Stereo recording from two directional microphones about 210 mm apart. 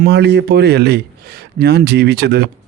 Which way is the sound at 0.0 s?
55° right (ahead or behind).